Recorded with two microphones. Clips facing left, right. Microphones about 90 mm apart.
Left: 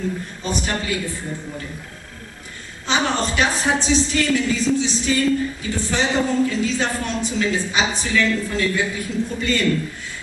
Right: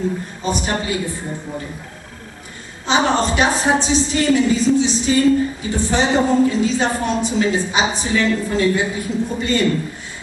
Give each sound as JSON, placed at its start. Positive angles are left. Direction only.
{"t": 0.4, "sound": "speech", "side_deg": -15}
{"t": 2.9, "sound": "a woman's voice", "side_deg": -20}